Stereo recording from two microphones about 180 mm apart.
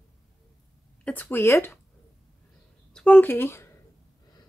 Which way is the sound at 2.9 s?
10° left (ahead or behind).